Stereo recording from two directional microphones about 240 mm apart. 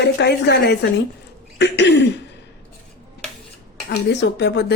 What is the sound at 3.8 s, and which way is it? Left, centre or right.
Speech, left.